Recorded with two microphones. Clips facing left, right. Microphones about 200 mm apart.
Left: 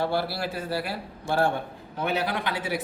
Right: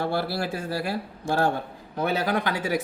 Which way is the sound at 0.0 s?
50° right (ahead or behind).